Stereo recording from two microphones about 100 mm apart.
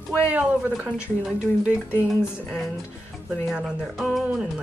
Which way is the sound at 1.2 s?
5° right (ahead or behind).